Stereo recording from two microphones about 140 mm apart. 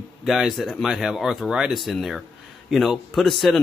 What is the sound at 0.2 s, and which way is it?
Speech, centre (ahead or behind).